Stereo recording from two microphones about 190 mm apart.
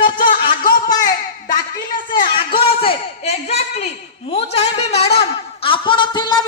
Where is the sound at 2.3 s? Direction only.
30° left (ahead or behind).